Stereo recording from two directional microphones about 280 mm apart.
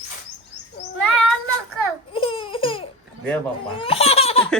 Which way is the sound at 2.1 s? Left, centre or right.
Centre.